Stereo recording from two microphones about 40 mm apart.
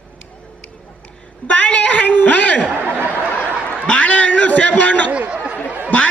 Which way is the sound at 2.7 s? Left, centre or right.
Right.